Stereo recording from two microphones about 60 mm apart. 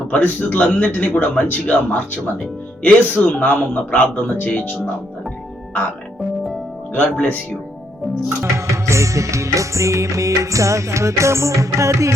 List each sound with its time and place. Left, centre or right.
0.1 s a man's voice: left
6.9 s a man's voice: left
8.5 s music: right